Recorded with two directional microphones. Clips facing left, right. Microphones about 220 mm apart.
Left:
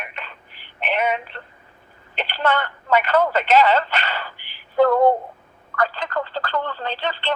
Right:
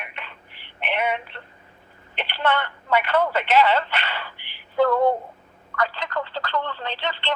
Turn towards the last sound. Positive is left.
turn(degrees=40)  # may be behind; listen again after turning